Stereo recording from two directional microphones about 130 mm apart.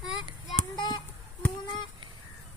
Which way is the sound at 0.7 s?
35° left (ahead or behind).